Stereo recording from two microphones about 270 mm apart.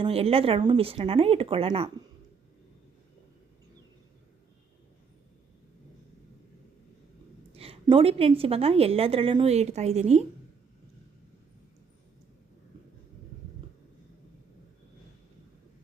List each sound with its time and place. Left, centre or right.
0.0 s a woman's voice: right
7.5 s a woman's voice: right